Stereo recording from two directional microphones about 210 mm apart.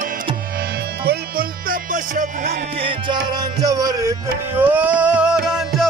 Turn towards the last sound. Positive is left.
turn(degrees=0)  # may be behind; listen again after turning